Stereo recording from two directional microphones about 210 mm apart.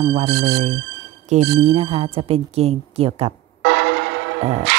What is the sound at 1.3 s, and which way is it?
Speech, 35° right (ahead or behind).